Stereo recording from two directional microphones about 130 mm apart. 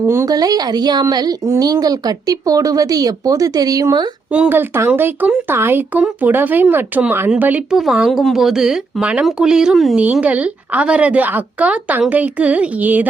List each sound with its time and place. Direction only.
0.0 s a woman's voice: 20° right (ahead or behind)
4.3 s speech: 10° right (ahead or behind)